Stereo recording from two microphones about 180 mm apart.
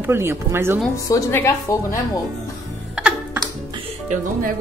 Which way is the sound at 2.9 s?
5° right (ahead or behind).